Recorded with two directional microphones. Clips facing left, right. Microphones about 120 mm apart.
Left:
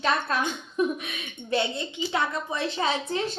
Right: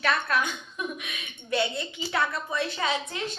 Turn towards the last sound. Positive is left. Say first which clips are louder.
# left 3 dB
turn(degrees=30)  # may be behind; listen again after turning